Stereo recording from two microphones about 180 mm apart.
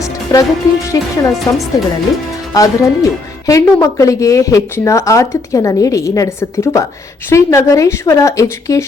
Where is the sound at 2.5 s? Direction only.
20° left (ahead or behind).